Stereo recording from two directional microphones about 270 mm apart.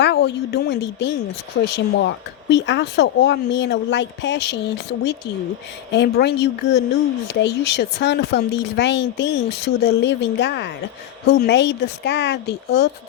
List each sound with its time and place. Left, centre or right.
0.0 s speech: left